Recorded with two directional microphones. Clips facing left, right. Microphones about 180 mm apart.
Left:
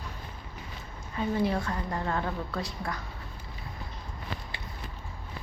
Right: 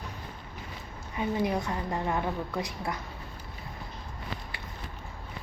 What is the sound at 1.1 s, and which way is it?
A woman's voice, 15° right (ahead or behind).